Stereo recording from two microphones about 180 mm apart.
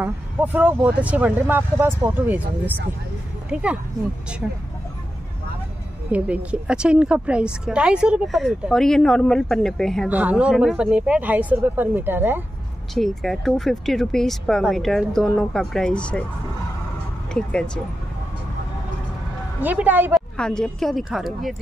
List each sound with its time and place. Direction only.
0.0 s speech: 10° right (ahead or behind)
6.1 s speech: 10° right (ahead or behind)
10.0 s speech: 10° right (ahead or behind)
12.9 s speech: centre (ahead or behind)
17.3 s speech: 5° left (ahead or behind)
19.6 s speech: 10° right (ahead or behind)
20.3 s speech: 5° left (ahead or behind)